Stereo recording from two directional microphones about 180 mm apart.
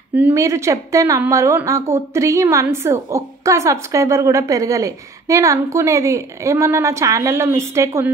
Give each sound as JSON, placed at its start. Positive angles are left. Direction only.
{"t": 0.1, "sound": "a woman's voice", "side_deg": -15}